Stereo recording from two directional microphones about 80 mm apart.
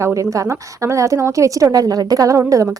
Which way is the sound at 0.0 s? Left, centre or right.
Right.